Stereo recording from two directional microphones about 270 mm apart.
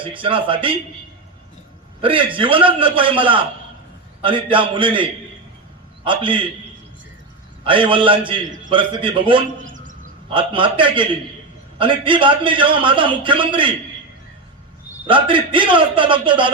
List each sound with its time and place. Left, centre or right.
0.0 s a man's voice: centre
2.0 s a man's voice: centre
6.1 s a man's voice: centre
7.6 s a man's voice: centre
9.6 s a man's voice: right
15.0 s a man's voice: centre